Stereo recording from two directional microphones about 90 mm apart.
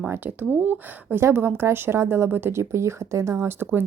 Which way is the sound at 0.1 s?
20° right (ahead or behind).